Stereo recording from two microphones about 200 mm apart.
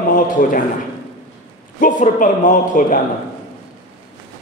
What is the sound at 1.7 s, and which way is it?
A man's voice, 40° left (ahead or behind).